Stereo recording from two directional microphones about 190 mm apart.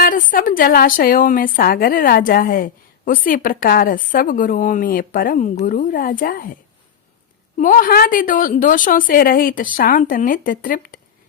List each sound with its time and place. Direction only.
0.0 s a woman's voice: 45° left (ahead or behind)
7.6 s a woman's voice: 45° left (ahead or behind)